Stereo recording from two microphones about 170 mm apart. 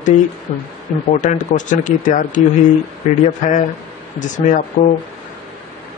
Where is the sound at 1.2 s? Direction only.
45° left (ahead or behind).